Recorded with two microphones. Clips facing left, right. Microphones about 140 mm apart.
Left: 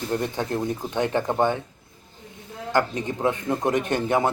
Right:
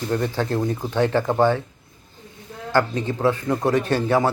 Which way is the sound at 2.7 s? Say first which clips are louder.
Right 3 dB; 20° left (ahead or behind).